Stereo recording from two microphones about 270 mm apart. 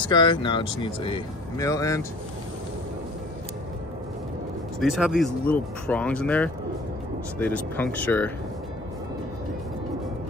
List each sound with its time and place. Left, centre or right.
0.0 s speech: centre
4.7 s speech: centre